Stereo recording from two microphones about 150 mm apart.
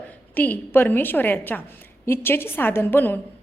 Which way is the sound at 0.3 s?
10° left (ahead or behind).